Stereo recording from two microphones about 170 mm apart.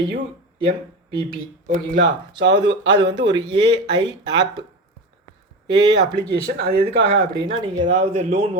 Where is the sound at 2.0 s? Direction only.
90° right.